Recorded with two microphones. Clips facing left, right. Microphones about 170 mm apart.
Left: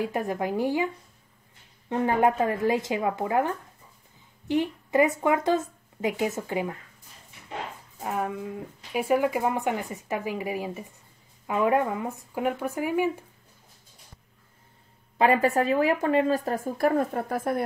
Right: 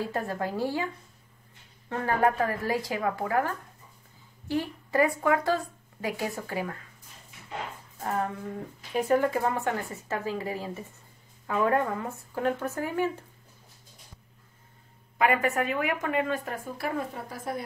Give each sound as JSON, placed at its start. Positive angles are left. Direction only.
{"t": 0.0, "sound": "speech", "side_deg": 15}
{"t": 8.0, "sound": "a sound", "side_deg": 10}
{"t": 8.9, "sound": "speech", "side_deg": 10}
{"t": 15.1, "sound": "speech", "side_deg": 30}